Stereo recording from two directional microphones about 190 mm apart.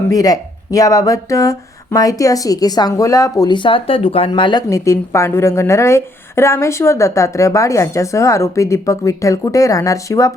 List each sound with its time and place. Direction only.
0.1 s speech: 20° left (ahead or behind)